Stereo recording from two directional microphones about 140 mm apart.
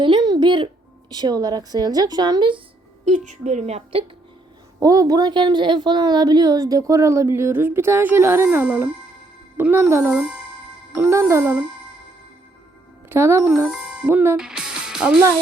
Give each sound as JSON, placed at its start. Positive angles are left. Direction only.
{"t": 0.0, "sound": "a sound", "side_deg": -30}
{"t": 1.1, "sound": "a woman's voice", "side_deg": -30}
{"t": 3.0, "sound": "a woman's voice", "side_deg": -55}
{"t": 4.8, "sound": "a woman's voice", "side_deg": -25}
{"t": 13.1, "sound": "speech", "side_deg": -20}
{"t": 13.7, "sound": "speech", "side_deg": -5}